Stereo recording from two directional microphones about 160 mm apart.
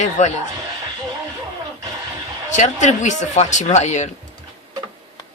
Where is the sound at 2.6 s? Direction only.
50° left (ahead or behind).